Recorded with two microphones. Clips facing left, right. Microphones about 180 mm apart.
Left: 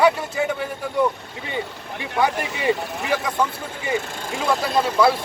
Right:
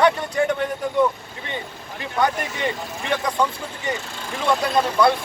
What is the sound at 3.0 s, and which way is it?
Speech, 5° left (ahead or behind).